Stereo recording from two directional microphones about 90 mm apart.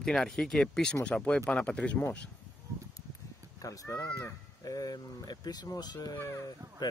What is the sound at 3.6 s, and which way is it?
Speech, 40° left (ahead or behind).